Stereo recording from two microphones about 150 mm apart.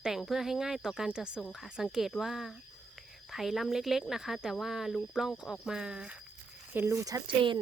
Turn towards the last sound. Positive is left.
turn(degrees=-30)  # may be behind; listen again after turning